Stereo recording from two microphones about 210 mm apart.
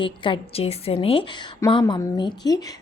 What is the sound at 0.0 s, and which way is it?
A woman's voice, 25° left (ahead or behind).